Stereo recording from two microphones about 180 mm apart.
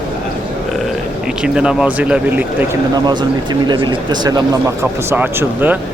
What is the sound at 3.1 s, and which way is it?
Speech, 25° right (ahead or behind).